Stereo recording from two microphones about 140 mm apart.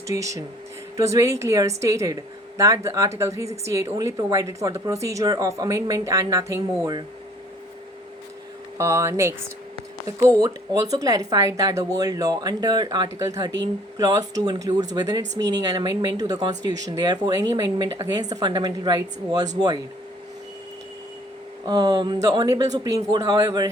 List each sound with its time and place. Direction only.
0.1 s speech: 25° right (ahead or behind)
8.8 s speech: 20° right (ahead or behind)
21.7 s speech: 30° right (ahead or behind)